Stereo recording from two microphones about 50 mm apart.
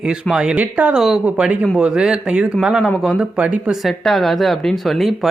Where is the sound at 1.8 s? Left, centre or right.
Centre.